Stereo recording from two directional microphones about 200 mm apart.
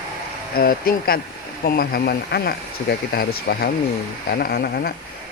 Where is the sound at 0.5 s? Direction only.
50° left (ahead or behind).